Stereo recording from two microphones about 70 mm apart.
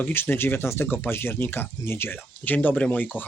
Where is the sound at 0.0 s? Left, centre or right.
Left.